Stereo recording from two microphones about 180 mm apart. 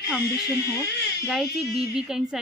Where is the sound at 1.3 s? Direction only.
Centre (ahead or behind).